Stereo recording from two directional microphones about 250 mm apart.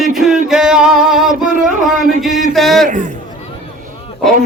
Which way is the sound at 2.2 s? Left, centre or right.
Centre.